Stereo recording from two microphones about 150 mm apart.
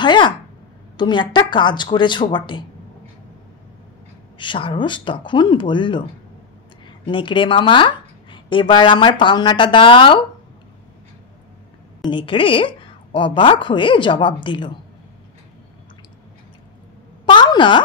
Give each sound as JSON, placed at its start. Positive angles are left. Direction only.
{"t": 0.0, "sound": "a woman's voice", "side_deg": 30}
{"t": 4.4, "sound": "a woman's voice", "side_deg": 35}
{"t": 7.1, "sound": "a woman's voice", "side_deg": 35}
{"t": 12.0, "sound": "a woman's voice", "side_deg": 35}
{"t": 17.3, "sound": "a sound", "side_deg": 30}